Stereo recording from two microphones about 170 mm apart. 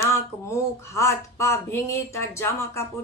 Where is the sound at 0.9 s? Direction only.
15° left (ahead or behind).